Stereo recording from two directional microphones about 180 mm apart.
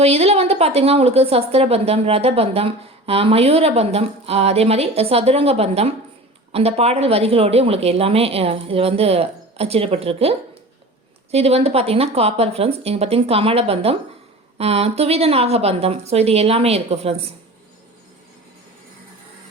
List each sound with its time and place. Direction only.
0.0 s a woman's voice: 35° right (ahead or behind)